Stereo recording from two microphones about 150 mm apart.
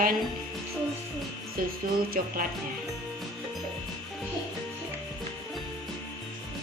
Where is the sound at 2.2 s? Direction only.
65° right (ahead or behind).